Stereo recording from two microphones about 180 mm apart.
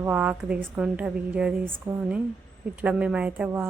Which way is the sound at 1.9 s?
25° right (ahead or behind).